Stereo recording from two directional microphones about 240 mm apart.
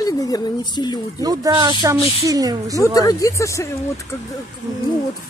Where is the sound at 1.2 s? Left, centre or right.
Centre.